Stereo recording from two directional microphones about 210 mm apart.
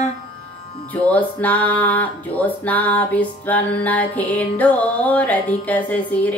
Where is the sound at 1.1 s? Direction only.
5° left (ahead or behind).